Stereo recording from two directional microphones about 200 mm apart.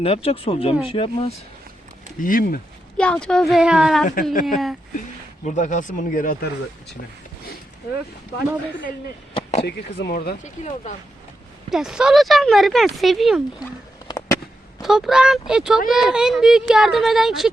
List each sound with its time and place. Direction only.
0.0 s speech: 30° left (ahead or behind)
2.2 s speech: 45° left (ahead or behind)
3.0 s speech: 5° left (ahead or behind)
4.0 s speech: 45° left (ahead or behind)
5.5 s speech: 40° left (ahead or behind)
9.3 s a sound: 30° left (ahead or behind)
9.6 s speech: 55° left (ahead or behind)
10.4 s speech: 35° left (ahead or behind)
11.7 s speech: centre (ahead or behind)
14.8 s speech: centre (ahead or behind)